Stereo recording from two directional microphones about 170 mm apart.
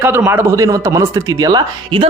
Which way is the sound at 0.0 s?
10° right (ahead or behind).